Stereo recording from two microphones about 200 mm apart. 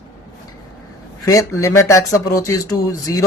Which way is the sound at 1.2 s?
15° left (ahead or behind).